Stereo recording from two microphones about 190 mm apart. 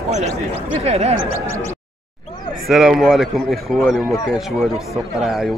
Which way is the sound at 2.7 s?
Centre (ahead or behind).